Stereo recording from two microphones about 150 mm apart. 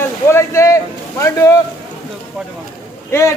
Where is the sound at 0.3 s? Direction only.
20° left (ahead or behind).